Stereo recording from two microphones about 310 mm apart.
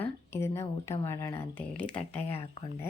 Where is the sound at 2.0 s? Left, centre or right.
Centre.